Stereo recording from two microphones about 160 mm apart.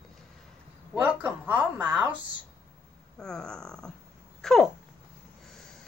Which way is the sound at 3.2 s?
5° left (ahead or behind).